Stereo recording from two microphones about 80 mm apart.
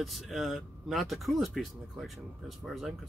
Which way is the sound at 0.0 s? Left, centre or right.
Centre.